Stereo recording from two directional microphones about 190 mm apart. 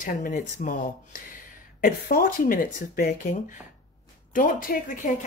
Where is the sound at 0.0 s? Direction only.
45° left (ahead or behind).